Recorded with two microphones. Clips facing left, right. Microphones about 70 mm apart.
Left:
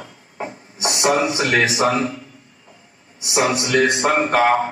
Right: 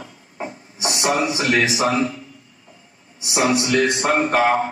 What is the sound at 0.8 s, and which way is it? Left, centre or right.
Speech, left.